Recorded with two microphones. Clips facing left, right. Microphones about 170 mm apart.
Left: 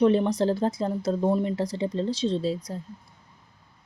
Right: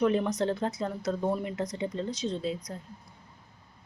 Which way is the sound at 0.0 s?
30° left (ahead or behind).